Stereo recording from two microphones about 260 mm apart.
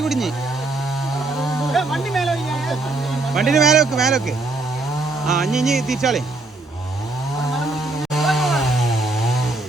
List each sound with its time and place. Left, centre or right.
0.0 s speech: centre
1.4 s a sound: centre
3.3 s speech: centre
5.2 s speech: centre
8.1 s chainsaw: centre